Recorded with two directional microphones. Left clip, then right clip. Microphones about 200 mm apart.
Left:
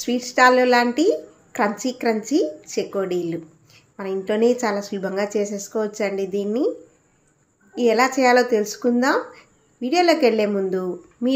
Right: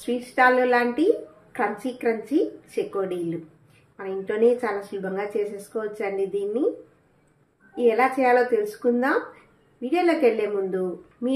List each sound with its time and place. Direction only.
0.0 s speech: 40° left (ahead or behind)
7.7 s speech: 40° left (ahead or behind)